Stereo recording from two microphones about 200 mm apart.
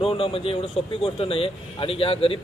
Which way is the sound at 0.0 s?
30° left (ahead or behind).